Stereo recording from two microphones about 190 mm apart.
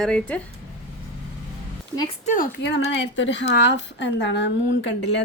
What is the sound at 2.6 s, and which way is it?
Speech, 75° left (ahead or behind).